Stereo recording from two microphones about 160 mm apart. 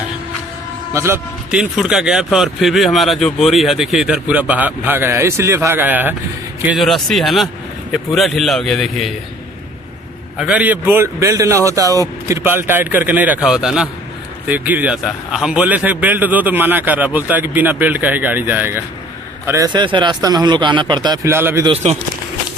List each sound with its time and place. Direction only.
0.9 s speech: 15° right (ahead or behind)
1.5 s speech: 5° right (ahead or behind)
6.8 s speech: centre (ahead or behind)
10.4 s speech: 10° right (ahead or behind); by 21.3 s 25° right (ahead or behind)
21.3 s speech: 15° right (ahead or behind)